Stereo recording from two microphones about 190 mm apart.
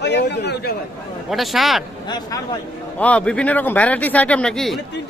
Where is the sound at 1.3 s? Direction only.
Centre (ahead or behind).